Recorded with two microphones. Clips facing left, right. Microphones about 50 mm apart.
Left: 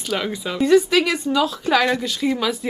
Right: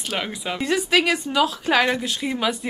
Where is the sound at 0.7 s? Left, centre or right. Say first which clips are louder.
Left 4 dB; right.